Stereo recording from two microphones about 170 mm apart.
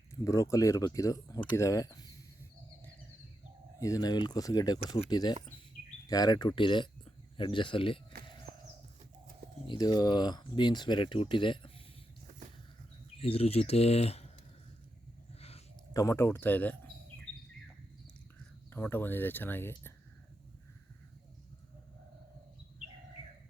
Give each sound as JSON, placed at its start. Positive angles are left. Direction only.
{"t": 0.1, "sound": "speech", "side_deg": 15}
{"t": 3.8, "sound": "speech", "side_deg": 20}
{"t": 9.6, "sound": "speech", "side_deg": 25}
{"t": 13.1, "sound": "speech", "side_deg": 35}
{"t": 15.4, "sound": "a sound", "side_deg": 35}
{"t": 15.9, "sound": "speech", "side_deg": 20}
{"t": 18.7, "sound": "speech", "side_deg": 10}